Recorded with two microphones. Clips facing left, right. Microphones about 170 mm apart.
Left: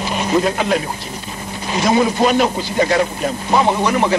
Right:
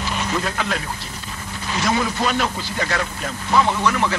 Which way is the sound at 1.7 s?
20° left (ahead or behind).